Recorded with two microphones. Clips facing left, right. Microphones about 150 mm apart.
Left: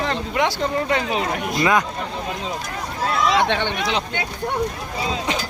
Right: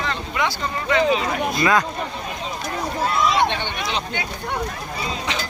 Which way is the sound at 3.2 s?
90° left.